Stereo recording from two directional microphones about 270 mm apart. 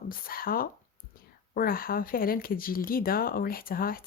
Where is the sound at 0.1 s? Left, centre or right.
Left.